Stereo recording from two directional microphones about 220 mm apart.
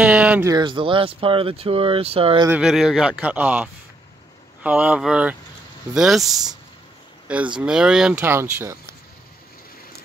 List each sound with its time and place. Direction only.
0.0 s speech: 5° right (ahead or behind); by 2.5 s 25° right (ahead or behind)
2.5 s speech: centre (ahead or behind)